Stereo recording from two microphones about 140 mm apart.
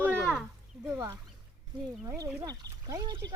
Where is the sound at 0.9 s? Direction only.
20° right (ahead or behind).